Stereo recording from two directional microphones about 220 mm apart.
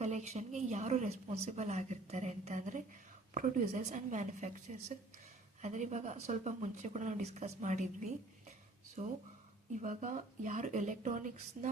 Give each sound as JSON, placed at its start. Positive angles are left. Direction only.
{"t": 0.0, "sound": "speech", "side_deg": -30}